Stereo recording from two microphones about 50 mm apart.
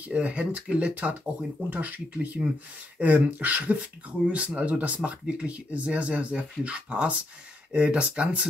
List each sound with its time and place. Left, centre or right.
0.0 s speech: right